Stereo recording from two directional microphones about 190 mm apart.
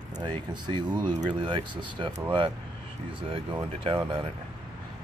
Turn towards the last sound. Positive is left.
turn(degrees=-25)  # may be behind; listen again after turning